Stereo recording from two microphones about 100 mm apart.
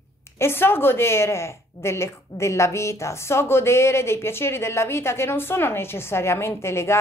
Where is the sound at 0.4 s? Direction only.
25° left (ahead or behind).